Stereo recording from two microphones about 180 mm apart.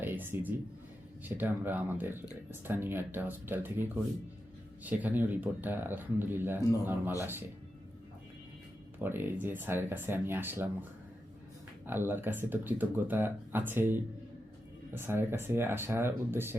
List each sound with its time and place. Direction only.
0.0 s speech: 10° right (ahead or behind)
9.0 s speech: 10° right (ahead or behind)
11.9 s speech: 10° right (ahead or behind)